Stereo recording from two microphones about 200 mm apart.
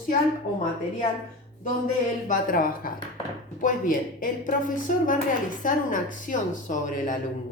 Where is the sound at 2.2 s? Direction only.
45° left (ahead or behind).